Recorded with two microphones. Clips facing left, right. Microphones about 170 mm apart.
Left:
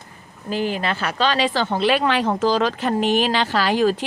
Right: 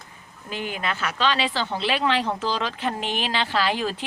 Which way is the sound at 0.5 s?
35° left (ahead or behind).